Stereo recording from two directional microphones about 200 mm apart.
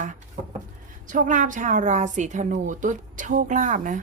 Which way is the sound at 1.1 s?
40° right (ahead or behind).